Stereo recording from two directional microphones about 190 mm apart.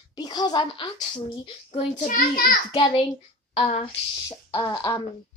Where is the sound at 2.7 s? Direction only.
25° left (ahead or behind).